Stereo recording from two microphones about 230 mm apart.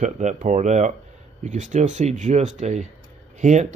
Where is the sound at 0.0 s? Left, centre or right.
Right.